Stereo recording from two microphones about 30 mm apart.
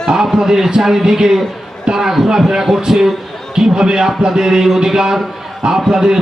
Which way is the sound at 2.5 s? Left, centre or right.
Centre.